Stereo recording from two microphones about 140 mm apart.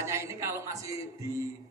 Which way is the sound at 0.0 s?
20° right (ahead or behind).